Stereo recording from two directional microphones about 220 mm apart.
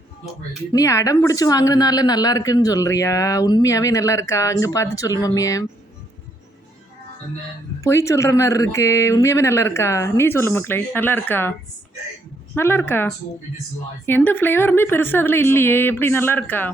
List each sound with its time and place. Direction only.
0.7 s a woman's voice: 15° left (ahead or behind)
7.9 s a woman's voice: 15° left (ahead or behind)
12.5 s a woman's voice: 10° left (ahead or behind)